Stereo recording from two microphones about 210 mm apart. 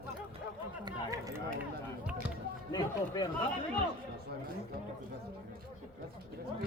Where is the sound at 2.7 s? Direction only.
20° left (ahead or behind).